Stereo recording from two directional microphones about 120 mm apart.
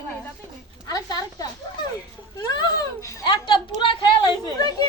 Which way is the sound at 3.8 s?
45° left (ahead or behind).